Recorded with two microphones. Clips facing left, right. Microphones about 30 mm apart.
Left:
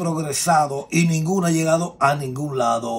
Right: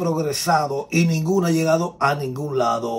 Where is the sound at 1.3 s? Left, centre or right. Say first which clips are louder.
Right 1 dB; right.